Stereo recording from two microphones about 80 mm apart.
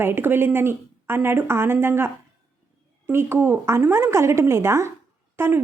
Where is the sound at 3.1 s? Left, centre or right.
Right.